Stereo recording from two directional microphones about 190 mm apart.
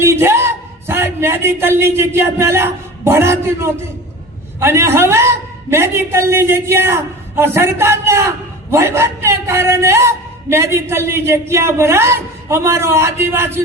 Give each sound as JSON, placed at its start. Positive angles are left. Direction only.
{"t": 0.0, "sound": "a man's voice", "side_deg": -15}